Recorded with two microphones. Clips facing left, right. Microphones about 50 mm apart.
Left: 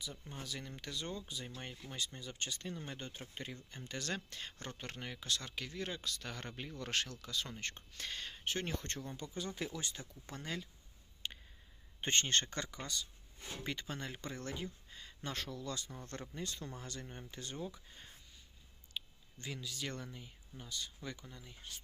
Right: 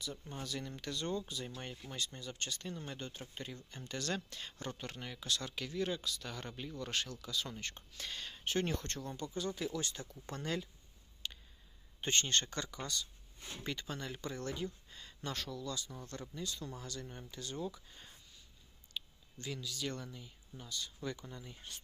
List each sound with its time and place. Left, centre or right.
0.0 s speech: centre
4.3 s speech: left
6.0 s speech: left
6.7 s speech: left
7.2 s speech: left
8.4 s speech: centre
11.2 s a sound: left
11.9 s speech: left; by 15.1 s centre
15.2 s speech: left
17.7 s speech: centre
21.2 s speech: centre